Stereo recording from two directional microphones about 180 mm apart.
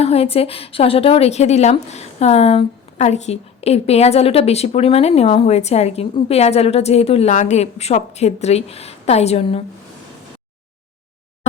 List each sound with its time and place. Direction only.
0.0 s a woman's voice: 35° left (ahead or behind)